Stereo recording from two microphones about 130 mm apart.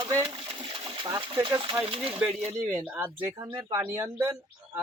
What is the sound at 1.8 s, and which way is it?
Speech, 45° right (ahead or behind).